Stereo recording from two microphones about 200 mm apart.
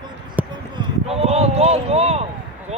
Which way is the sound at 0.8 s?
30° right (ahead or behind).